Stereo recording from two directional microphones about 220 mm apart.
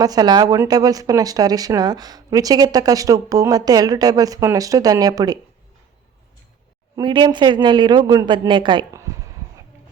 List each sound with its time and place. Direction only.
0.0 s speech: 15° right (ahead or behind)
6.9 s a man's voice: 20° right (ahead or behind)